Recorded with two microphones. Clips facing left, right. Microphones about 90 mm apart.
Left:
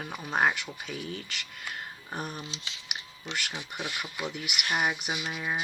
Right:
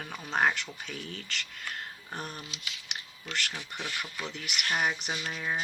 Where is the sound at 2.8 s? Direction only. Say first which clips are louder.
Left 3 dB; 10° left (ahead or behind).